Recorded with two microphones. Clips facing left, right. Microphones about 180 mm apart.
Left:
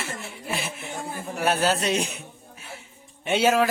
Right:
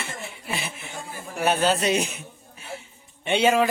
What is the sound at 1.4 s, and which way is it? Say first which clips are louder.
Speech: right 2 dB; centre (ahead or behind).